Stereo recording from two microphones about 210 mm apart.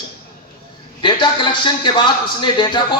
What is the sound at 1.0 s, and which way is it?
A man's voice, 20° left (ahead or behind).